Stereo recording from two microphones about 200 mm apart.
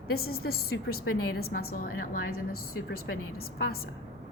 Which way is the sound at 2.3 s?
90° left.